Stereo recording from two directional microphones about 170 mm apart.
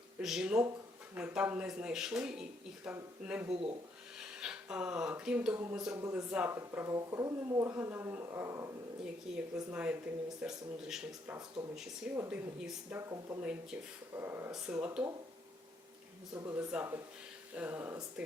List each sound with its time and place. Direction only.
0.2 s speech: 5° right (ahead or behind)
3.5 s speech: 35° right (ahead or behind)
4.2 s speech: 5° right (ahead or behind)
9.0 s speech: 5° right (ahead or behind)
12.1 s speech: 15° right (ahead or behind)
12.5 s speech: 5° right (ahead or behind)
13.0 s speech: 20° right (ahead or behind)
13.4 s speech: 5° right (ahead or behind)
16.3 s speech: 20° right (ahead or behind)
16.6 s speech: 10° right (ahead or behind)